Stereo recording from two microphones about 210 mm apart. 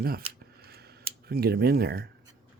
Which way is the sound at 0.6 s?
50° right (ahead or behind).